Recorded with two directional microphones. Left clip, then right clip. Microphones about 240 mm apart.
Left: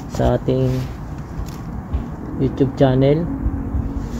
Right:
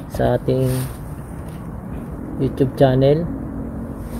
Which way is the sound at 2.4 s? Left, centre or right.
Centre.